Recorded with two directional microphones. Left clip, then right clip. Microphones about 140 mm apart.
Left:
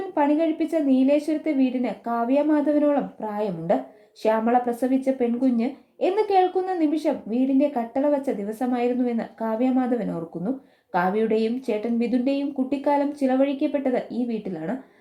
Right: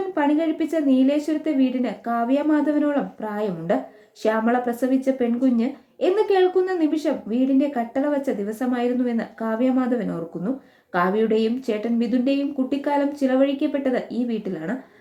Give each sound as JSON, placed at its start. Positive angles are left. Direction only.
{"t": 0.1, "sound": "speech", "side_deg": 25}